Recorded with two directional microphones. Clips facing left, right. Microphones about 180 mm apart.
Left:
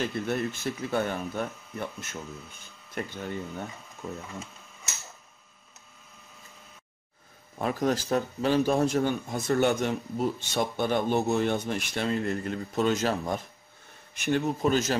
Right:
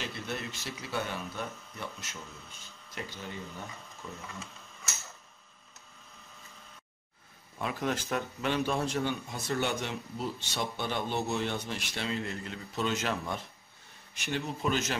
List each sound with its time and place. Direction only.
0.0 s speech: 55° left (ahead or behind)
4.0 s a man's voice: 40° left (ahead or behind)
7.5 s speech: 40° left (ahead or behind)
14.1 s speech: 55° left (ahead or behind)
14.6 s a man's voice: 40° left (ahead or behind)